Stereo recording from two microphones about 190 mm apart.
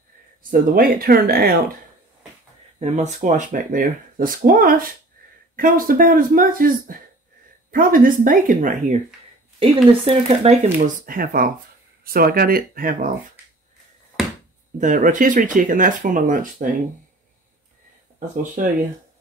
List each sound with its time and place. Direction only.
0.4 s speech: 50° right (ahead or behind)
2.8 s speech: 40° right (ahead or behind)
10.0 s speech: 35° right (ahead or behind)
11.1 s speech: 50° right (ahead or behind)
14.8 s speech: 45° right (ahead or behind)
18.3 s speech: 40° right (ahead or behind)